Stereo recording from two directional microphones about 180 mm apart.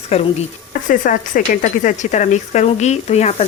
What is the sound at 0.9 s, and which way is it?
Speech, 50° left (ahead or behind).